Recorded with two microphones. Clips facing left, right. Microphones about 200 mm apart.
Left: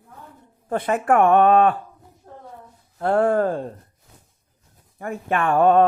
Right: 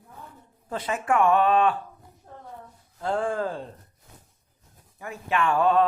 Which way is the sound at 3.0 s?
65° left (ahead or behind).